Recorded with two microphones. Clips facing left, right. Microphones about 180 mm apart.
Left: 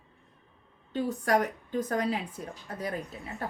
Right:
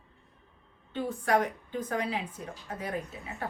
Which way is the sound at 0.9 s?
40° left (ahead or behind).